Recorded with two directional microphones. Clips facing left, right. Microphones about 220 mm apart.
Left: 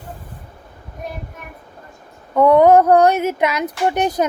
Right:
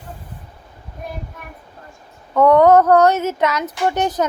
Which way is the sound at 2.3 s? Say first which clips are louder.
Even; 10° left (ahead or behind).